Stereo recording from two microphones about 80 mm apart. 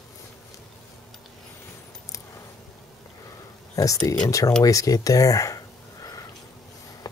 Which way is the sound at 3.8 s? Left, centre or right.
Left.